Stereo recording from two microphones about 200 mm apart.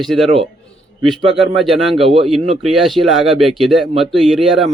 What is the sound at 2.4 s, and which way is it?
Speech, 30° right (ahead or behind).